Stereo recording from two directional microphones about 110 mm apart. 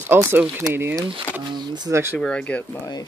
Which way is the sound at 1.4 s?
40° right (ahead or behind).